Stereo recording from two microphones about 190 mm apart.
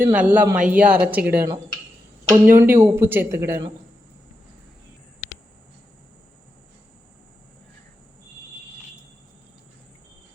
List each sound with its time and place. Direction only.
0.0 s speech: 5° right (ahead or behind)